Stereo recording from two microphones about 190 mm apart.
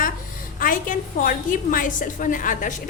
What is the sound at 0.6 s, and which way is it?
Speech, 45° left (ahead or behind).